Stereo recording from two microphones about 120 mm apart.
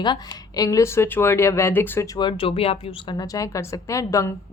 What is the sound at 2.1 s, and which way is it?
Speech, 45° left (ahead or behind).